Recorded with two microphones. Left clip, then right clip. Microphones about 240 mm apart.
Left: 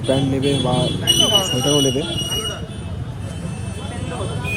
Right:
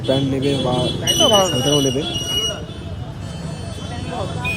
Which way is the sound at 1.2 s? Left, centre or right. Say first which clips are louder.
Right 4 dB; right.